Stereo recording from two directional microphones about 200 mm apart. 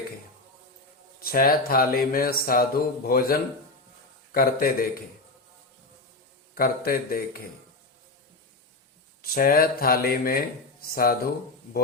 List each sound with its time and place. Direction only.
1.2 s speech: 45° left (ahead or behind)
6.5 s speech: 45° left (ahead or behind)
9.3 s speech: 45° left (ahead or behind)